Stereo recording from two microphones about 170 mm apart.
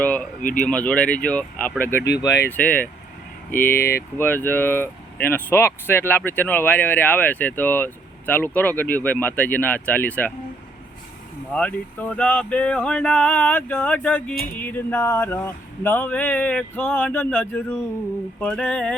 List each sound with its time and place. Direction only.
0.6 s speech: 5° left (ahead or behind)
11.5 s speech: 5° left (ahead or behind)